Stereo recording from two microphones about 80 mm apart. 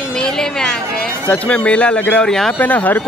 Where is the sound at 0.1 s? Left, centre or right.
Centre.